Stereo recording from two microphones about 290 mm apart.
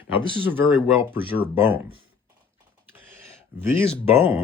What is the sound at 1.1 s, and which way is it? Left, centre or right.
Speech, centre.